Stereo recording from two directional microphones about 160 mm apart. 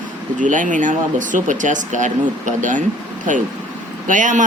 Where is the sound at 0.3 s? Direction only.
55° right (ahead or behind).